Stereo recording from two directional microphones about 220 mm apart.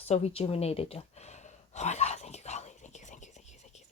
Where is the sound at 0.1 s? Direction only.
30° left (ahead or behind).